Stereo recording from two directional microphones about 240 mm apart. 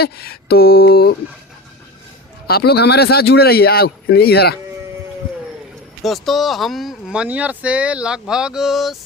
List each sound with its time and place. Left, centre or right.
0.0 s a man's voice: left
2.5 s a man's voice: left
6.1 s speech: centre